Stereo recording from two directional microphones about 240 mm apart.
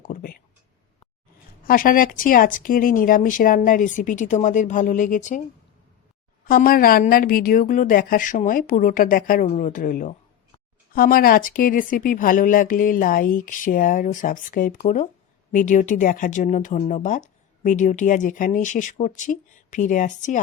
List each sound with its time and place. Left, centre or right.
0.0 s a sound: left
1.6 s speech: left
6.5 s speech: left